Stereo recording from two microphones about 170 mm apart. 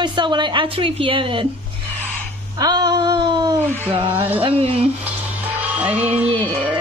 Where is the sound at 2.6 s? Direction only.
25° right (ahead or behind).